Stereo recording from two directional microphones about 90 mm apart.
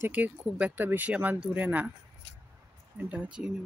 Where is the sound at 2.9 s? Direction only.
15° right (ahead or behind).